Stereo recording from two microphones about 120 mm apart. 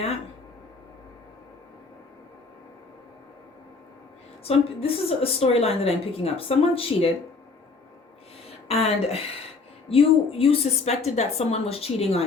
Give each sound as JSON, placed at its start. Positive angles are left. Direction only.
{"t": 4.4, "sound": "a woman's voice", "side_deg": 55}
{"t": 8.6, "sound": "speech", "side_deg": 55}
{"t": 9.9, "sound": "a woman's voice", "side_deg": 50}